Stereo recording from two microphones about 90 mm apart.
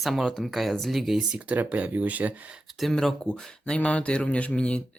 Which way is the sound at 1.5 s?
15° right (ahead or behind).